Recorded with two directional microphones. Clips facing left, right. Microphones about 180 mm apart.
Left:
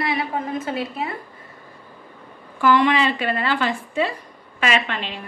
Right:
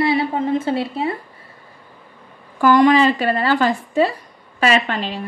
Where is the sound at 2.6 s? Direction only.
40° right (ahead or behind).